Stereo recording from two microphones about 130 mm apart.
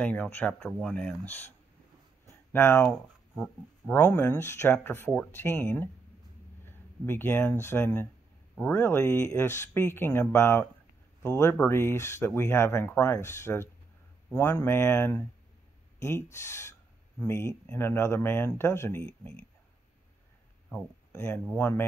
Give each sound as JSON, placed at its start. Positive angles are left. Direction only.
{"t": 0.0, "sound": "speech", "side_deg": 10}
{"t": 2.5, "sound": "speech", "side_deg": 15}
{"t": 2.9, "sound": "speech", "side_deg": 5}
{"t": 3.9, "sound": "speech", "side_deg": 15}
{"t": 21.5, "sound": "speech", "side_deg": 15}